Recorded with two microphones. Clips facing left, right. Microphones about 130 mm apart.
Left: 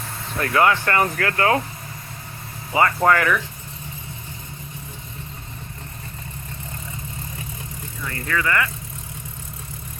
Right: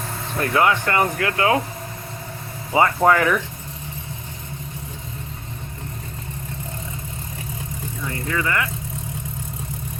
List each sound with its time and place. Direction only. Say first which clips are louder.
0.5 s speech: left 1 dB; 15° right (ahead or behind)
2.7 s speech: right 1 dB; 10° right (ahead or behind)
8.0 s speech: even; 20° right (ahead or behind)